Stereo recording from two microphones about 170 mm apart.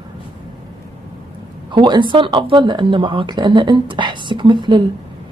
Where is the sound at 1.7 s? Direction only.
25° right (ahead or behind).